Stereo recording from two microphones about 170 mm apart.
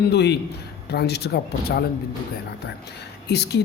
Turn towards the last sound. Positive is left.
turn(degrees=75)  # may be behind; listen again after turning